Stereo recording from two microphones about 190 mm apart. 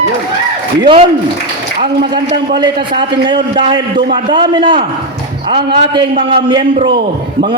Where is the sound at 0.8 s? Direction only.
25° right (ahead or behind).